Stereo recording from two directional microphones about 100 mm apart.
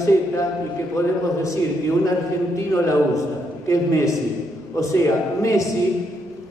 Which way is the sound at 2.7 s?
30° left (ahead or behind).